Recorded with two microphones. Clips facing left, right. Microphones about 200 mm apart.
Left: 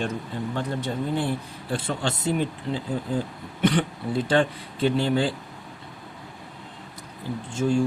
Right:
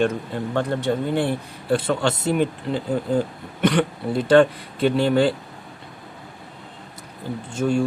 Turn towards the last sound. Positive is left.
turn(degrees=-65)  # may be behind; listen again after turning